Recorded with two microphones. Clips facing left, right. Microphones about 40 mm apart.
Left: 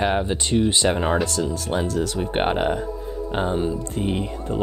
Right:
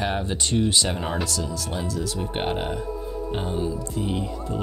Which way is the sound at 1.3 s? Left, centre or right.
Left.